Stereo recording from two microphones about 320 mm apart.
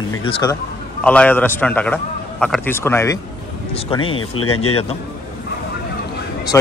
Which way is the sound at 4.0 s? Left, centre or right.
Left.